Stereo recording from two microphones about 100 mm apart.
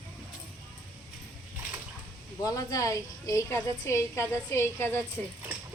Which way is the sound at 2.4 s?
35° left (ahead or behind).